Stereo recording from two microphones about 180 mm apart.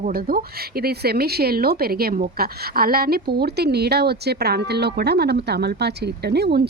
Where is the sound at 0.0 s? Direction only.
55° right (ahead or behind).